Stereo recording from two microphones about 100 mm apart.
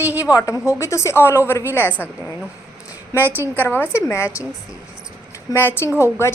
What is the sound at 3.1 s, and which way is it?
Speech, 20° right (ahead or behind).